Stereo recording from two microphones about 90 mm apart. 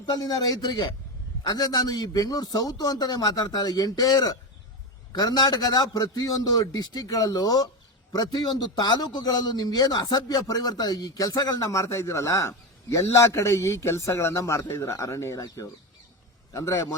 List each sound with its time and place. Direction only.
0.0 s a man's voice: 50° left (ahead or behind)